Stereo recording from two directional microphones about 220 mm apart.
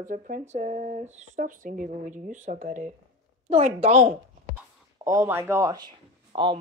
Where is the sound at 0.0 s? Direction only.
35° right (ahead or behind).